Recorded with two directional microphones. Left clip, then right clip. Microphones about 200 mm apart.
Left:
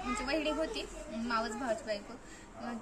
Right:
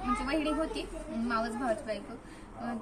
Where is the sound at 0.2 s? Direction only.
10° left (ahead or behind).